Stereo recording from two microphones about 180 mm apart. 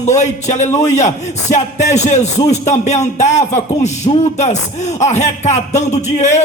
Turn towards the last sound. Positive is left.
turn(degrees=40)  # may be behind; listen again after turning